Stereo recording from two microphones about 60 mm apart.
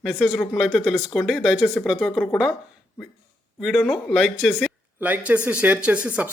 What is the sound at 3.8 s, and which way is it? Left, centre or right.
Speech, centre.